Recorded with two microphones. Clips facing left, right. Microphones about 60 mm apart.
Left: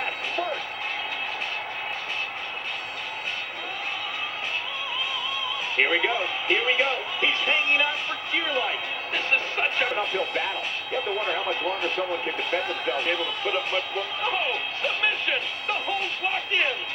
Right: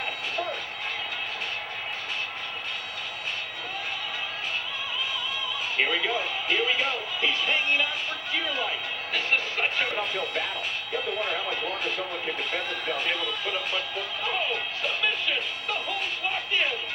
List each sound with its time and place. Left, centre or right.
5.8 s speech: left
9.1 s speech: left
15.0 s speech: left